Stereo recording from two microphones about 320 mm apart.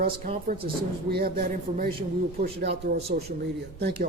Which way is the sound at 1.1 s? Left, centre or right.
Right.